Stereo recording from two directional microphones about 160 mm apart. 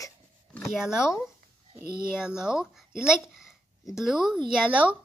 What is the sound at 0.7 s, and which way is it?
Speech, 5° right (ahead or behind).